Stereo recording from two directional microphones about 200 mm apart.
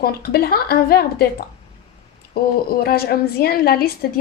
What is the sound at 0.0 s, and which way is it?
A woman's voice, 50° left (ahead or behind).